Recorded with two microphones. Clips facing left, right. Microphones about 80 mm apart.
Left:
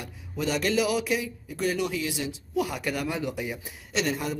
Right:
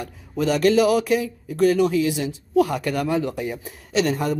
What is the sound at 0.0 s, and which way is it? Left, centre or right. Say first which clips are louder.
Speech: right 7 dB; right.